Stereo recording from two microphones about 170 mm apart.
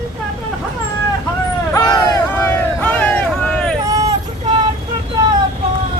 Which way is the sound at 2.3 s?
10° left (ahead or behind).